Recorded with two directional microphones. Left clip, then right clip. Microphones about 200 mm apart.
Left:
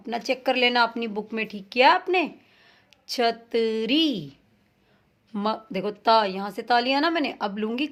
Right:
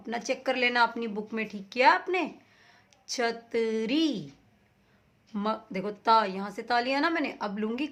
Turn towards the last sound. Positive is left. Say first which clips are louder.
# left 5 dB
turn(degrees=25)  # may be behind; listen again after turning